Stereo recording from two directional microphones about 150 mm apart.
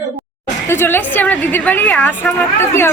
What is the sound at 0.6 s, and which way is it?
A woman's voice, 15° left (ahead or behind).